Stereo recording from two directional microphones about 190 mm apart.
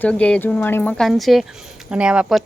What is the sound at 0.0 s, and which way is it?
Speech, 5° left (ahead or behind).